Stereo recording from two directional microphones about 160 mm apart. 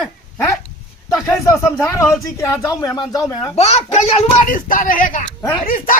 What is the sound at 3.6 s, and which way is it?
Speech, 45° left (ahead or behind).